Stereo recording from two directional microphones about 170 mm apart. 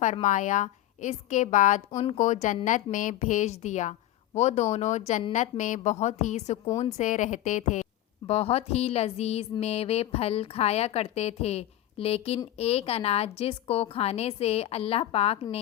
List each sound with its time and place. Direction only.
0.0 s a woman's voice: 45° left (ahead or behind)